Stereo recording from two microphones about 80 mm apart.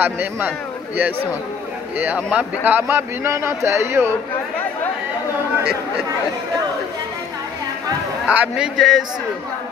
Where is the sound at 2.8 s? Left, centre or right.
Right.